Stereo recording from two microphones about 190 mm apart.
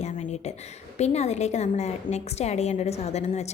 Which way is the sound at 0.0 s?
35° left (ahead or behind).